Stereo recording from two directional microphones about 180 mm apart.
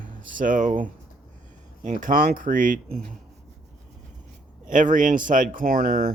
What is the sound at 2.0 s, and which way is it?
Speech, 50° right (ahead or behind).